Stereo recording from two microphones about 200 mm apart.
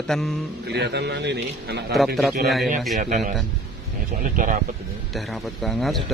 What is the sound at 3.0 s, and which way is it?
Speech, 40° right (ahead or behind).